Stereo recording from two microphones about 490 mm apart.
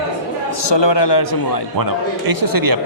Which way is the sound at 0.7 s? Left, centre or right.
Left.